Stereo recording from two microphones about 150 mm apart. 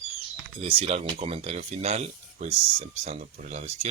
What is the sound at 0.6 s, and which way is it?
Speech, 40° right (ahead or behind).